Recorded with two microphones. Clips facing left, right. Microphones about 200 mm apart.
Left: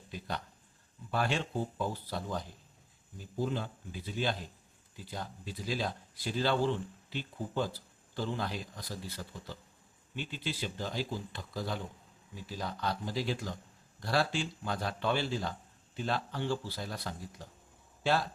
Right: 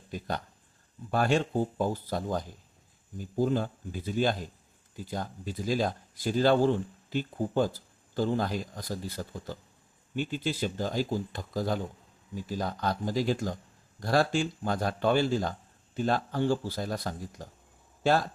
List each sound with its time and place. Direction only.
0.1 s speech: 45° right (ahead or behind)